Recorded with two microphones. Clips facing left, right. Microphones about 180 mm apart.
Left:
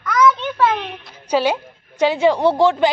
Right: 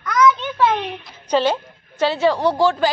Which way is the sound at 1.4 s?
10° left (ahead or behind).